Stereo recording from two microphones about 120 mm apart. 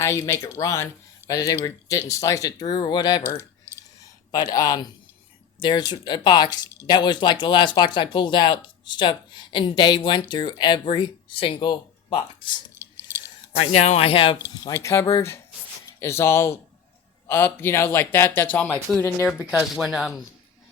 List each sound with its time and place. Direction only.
0.0 s speech: 25° left (ahead or behind)
3.2 s a sound: 20° right (ahead or behind)
4.3 s speech: 30° left (ahead or behind)
12.8 s a sound: 20° right (ahead or behind)
13.6 s speech: 65° left (ahead or behind); by 14.3 s 50° left (ahead or behind)
14.7 s speech: 25° left (ahead or behind)
19.5 s speech: centre (ahead or behind)